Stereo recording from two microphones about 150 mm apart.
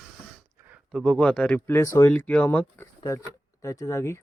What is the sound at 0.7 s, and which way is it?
Speech, centre (ahead or behind).